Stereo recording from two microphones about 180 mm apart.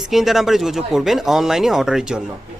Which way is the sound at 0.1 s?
Centre (ahead or behind).